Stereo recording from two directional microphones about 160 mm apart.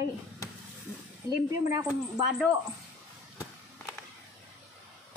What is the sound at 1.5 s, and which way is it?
Speech, 20° right (ahead or behind).